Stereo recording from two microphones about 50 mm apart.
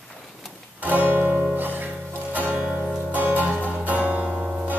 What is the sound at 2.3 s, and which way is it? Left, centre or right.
Music, right.